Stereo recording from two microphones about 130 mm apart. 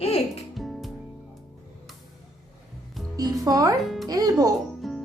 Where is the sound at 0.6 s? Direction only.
Centre (ahead or behind).